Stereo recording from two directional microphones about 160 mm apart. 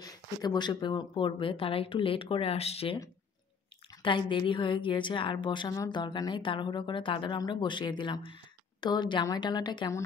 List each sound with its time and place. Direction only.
0.0 s speech: 25° left (ahead or behind)
4.0 s a woman's voice: 30° left (ahead or behind)